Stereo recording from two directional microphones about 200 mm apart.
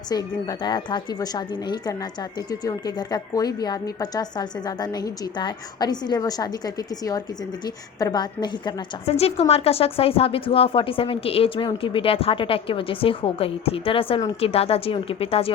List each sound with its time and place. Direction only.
0.1 s a woman's voice: 20° left (ahead or behind)
2.5 s a woman's voice: 20° left (ahead or behind)
7.9 s a woman's voice: 20° left (ahead or behind)